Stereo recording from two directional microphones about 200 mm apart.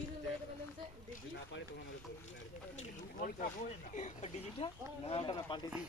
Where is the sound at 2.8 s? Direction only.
40° left (ahead or behind); by 5.7 s 25° left (ahead or behind).